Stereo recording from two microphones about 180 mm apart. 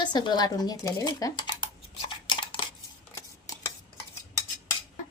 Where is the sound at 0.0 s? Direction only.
25° left (ahead or behind).